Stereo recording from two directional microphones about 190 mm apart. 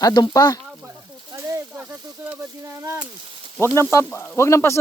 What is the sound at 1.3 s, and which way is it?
Snake, 15° right (ahead or behind).